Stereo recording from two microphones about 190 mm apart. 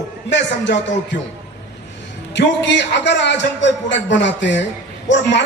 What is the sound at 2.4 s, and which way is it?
A man's voice, 65° left (ahead or behind).